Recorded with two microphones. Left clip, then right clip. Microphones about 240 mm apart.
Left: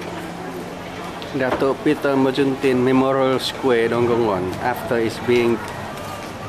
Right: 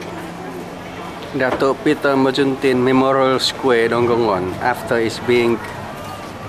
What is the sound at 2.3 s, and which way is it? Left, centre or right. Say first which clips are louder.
Speech: right 2 dB; centre.